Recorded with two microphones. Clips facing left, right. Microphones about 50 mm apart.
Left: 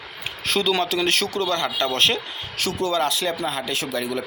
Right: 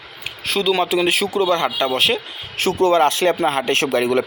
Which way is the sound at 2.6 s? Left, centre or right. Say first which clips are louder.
Right 8 dB; right.